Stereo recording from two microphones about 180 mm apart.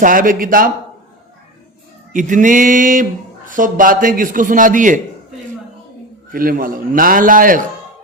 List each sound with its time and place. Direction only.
0.0 s speech: 50° right (ahead or behind)
2.1 s speech: 45° right (ahead or behind)
6.3 s speech: 50° right (ahead or behind)